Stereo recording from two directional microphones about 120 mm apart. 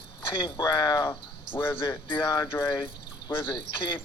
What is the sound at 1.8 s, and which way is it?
Speech, 45° left (ahead or behind).